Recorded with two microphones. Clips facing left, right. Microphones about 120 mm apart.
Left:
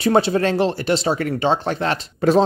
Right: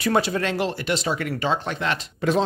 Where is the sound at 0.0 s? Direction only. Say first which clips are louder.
Left 5 dB; 30° left (ahead or behind).